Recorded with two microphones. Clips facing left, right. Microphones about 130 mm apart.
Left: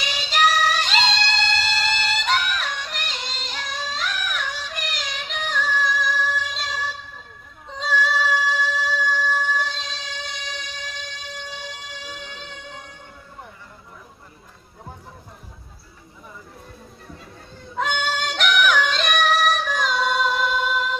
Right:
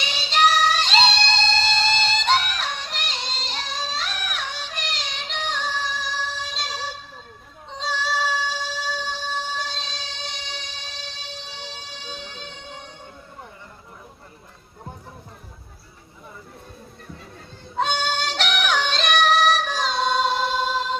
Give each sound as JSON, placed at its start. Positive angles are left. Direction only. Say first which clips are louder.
{"t": 0.0, "sound": "female singing", "louder": "right 1 dB", "side_deg": -30}
{"t": 7.8, "sound": "music", "louder": "left 3 dB", "side_deg": -30}
{"t": 11.7, "sound": "a sound", "louder": "left 1 dB", "side_deg": -30}
{"t": 17.7, "sound": "yodeling", "louder": "right 1 dB", "side_deg": -30}